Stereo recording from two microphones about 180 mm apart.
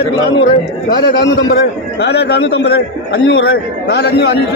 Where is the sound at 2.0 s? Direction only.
65° left (ahead or behind).